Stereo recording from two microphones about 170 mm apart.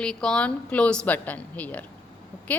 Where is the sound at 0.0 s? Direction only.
5° left (ahead or behind).